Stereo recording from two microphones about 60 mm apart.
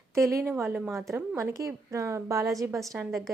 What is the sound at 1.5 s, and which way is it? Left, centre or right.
Speech, right.